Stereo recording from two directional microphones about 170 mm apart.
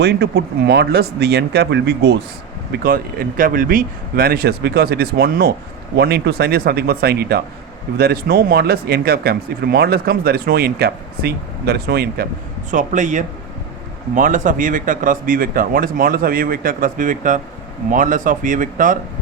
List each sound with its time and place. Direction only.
0.0 s speech: 80° right
2.8 s speech: 60° right (ahead or behind)
12.7 s speech: 45° right (ahead or behind)